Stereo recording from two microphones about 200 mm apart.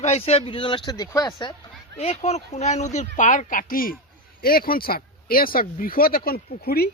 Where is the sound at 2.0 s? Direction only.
30° left (ahead or behind).